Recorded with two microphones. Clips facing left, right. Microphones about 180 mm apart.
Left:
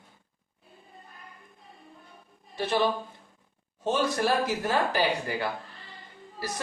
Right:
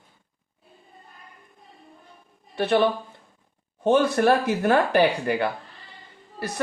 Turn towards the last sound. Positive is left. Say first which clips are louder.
# right 5 dB
turn(degrees=-60)  # may be behind; listen again after turning